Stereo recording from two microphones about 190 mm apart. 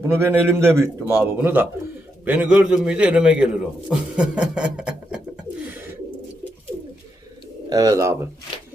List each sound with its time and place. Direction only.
0.1 s a man's voice: 10° right (ahead or behind)
7.7 s a man's voice: 20° right (ahead or behind)